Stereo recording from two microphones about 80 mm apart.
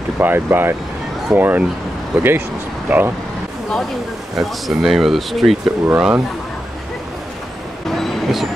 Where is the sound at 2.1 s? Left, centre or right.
Centre.